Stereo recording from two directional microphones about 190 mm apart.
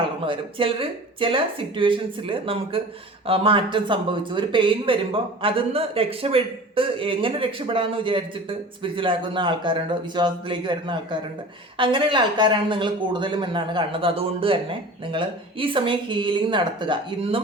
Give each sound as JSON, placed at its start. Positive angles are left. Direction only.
{"t": 0.3, "sound": "speech", "side_deg": -25}